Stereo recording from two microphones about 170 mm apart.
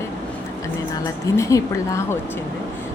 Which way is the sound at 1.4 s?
20° left (ahead or behind).